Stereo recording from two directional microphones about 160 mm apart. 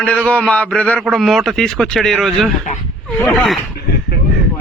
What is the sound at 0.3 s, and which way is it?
A man's voice, 5° left (ahead or behind).